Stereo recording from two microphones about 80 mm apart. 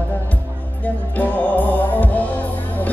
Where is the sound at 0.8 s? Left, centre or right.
Left.